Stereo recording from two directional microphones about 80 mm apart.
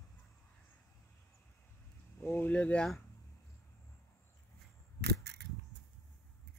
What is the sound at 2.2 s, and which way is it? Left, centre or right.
Speech, left.